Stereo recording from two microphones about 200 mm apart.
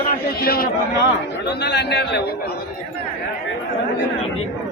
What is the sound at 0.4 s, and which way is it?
A man's voice, 50° left (ahead or behind).